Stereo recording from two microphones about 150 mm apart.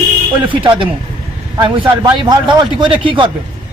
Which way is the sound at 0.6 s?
35° right (ahead or behind).